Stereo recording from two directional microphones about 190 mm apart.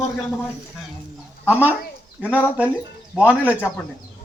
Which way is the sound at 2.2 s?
10° left (ahead or behind).